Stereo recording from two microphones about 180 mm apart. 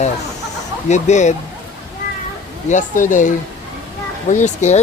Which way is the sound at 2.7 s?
45° left (ahead or behind).